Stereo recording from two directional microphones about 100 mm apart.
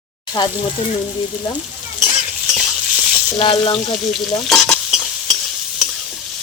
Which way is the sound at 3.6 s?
60° left (ahead or behind).